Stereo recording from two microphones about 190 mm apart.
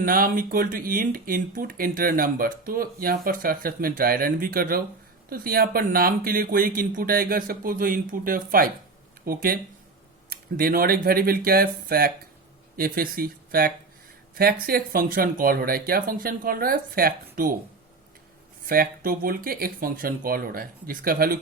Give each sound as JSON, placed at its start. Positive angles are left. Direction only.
{"t": 0.0, "sound": "speech", "side_deg": -50}
{"t": 18.7, "sound": "speech", "side_deg": -50}